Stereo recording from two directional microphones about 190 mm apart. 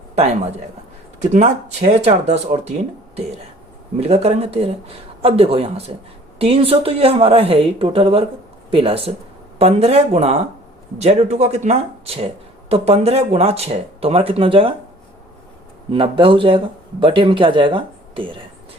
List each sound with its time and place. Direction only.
1.2 s speech: 40° right (ahead or behind)
4.0 s speech: 35° right (ahead or behind)
15.9 s speech: 25° right (ahead or behind)